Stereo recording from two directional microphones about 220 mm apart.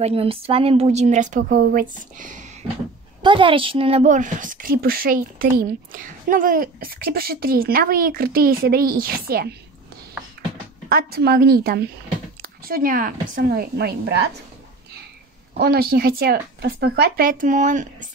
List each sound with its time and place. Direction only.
0.0 s a woman's voice: 25° right (ahead or behind)
3.2 s a woman's voice: 20° right (ahead or behind); by 9.6 s 45° right (ahead or behind)
10.9 s speech: 45° right (ahead or behind)
12.4 s a sound: 40° right (ahead or behind)
13.3 s speech: 45° right (ahead or behind)
15.5 s speech: 45° right (ahead or behind)